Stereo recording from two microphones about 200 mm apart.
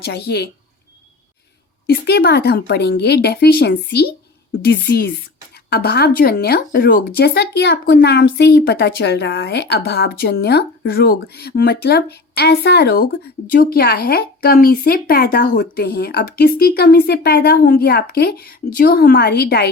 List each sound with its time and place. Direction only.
0.0 s speech: 55° left (ahead or behind)
1.9 s speech: 55° left (ahead or behind)